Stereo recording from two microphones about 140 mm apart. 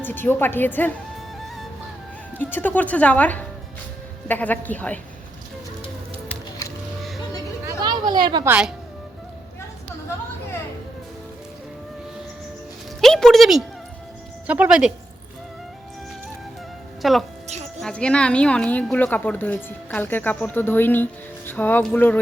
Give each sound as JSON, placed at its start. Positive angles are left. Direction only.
{"t": 0.0, "sound": "a woman's voice", "side_deg": 15}
{"t": 2.4, "sound": "a woman's voice", "side_deg": 15}
{"t": 7.7, "sound": "a sound", "side_deg": -30}
{"t": 8.4, "sound": "speech", "side_deg": -10}
{"t": 13.0, "sound": "speech", "side_deg": 5}
{"t": 17.0, "sound": "a woman's voice", "side_deg": 0}